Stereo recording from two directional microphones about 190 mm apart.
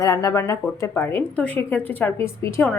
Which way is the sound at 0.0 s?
15° left (ahead or behind).